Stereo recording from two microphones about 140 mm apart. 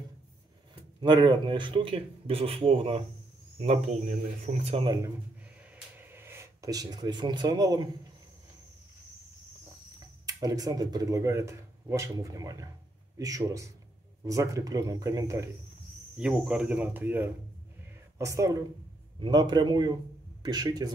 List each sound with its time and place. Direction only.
1.0 s speech: 35° right (ahead or behind); by 4.8 s 50° right (ahead or behind)
4.8 s speech: 25° right (ahead or behind)
10.2 s speech: 25° right (ahead or behind)
16.2 s speech: 5° right (ahead or behind)
18.1 s speech: 25° right (ahead or behind)
19.1 s speech: 35° right (ahead or behind)